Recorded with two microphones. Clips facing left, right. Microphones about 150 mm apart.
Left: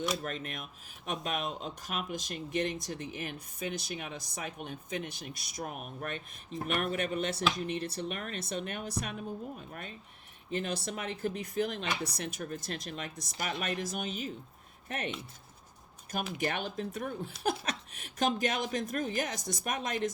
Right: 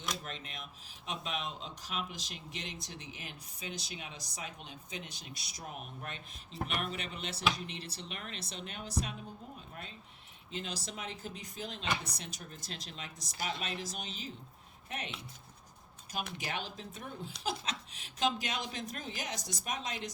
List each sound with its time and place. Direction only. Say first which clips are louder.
0.2 s speech: left 7 dB; 50° left (ahead or behind)
10.5 s speech: left 7 dB; 55° left (ahead or behind)
16.4 s speech: left 7 dB; 55° left (ahead or behind)